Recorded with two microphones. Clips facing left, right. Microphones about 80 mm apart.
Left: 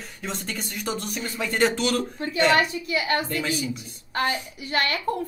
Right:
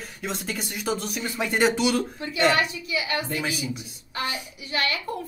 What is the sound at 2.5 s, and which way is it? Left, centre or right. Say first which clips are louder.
Speech: left 3 dB; left.